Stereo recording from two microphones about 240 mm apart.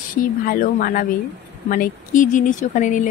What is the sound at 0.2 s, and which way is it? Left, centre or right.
Speech, left.